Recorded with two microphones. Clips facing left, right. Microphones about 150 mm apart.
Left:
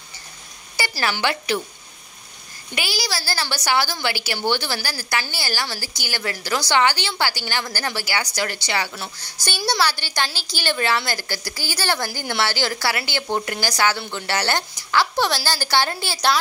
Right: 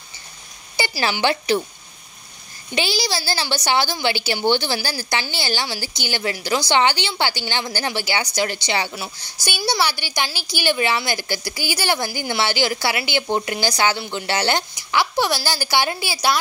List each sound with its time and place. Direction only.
0.7 s a sound: 20° right (ahead or behind)
1.2 s a woman's voice: 25° right (ahead or behind)
2.7 s a woman's voice: 25° right (ahead or behind)
8.9 s a woman's voice: 10° right (ahead or behind)